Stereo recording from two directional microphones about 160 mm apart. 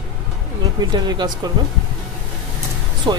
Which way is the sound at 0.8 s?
25° right (ahead or behind).